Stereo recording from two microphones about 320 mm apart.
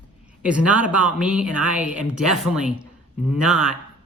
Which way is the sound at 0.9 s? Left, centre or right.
Centre.